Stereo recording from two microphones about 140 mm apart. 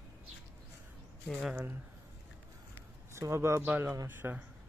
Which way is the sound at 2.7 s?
20° right (ahead or behind).